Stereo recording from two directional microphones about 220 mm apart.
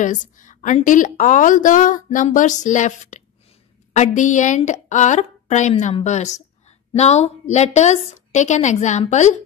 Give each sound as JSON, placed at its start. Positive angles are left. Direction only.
{"t": 0.0, "sound": "a woman's voice", "side_deg": 35}